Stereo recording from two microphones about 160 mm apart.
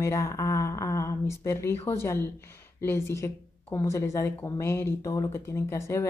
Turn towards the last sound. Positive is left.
turn(degrees=15)  # may be behind; listen again after turning